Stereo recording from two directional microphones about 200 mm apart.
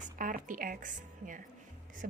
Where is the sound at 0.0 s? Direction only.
40° right (ahead or behind).